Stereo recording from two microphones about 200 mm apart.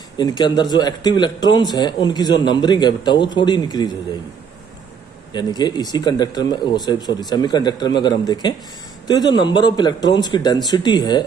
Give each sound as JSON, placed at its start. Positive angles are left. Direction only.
{"t": 0.2, "sound": "a man's voice", "side_deg": 20}
{"t": 5.3, "sound": "a man's voice", "side_deg": 20}